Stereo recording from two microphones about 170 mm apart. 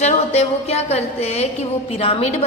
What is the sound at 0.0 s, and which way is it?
A woman's voice, 40° left (ahead or behind).